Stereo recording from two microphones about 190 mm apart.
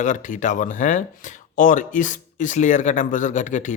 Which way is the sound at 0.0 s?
40° left (ahead or behind).